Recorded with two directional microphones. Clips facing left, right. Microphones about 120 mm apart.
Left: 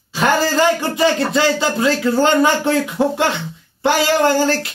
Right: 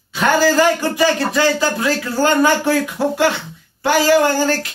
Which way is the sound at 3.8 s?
25° left (ahead or behind).